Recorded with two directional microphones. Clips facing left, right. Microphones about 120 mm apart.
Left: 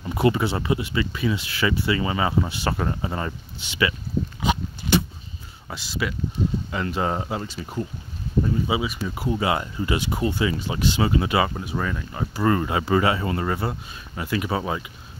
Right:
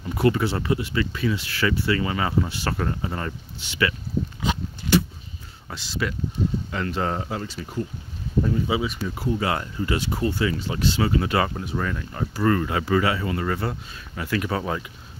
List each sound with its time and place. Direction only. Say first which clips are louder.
0.0 s speech: even; 20° left (ahead or behind)
4.4 s a sound: left 3 dB; 20° left (ahead or behind)
5.7 s speech: even; 10° left (ahead or behind)
8.6 s speech: even; 10° left (ahead or behind); by 13.5 s 30° left (ahead or behind)
13.5 s speech: even; 15° left (ahead or behind)